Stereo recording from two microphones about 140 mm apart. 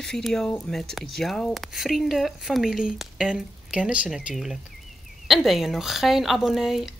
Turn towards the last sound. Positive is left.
turn(degrees=0)  # may be behind; listen again after turning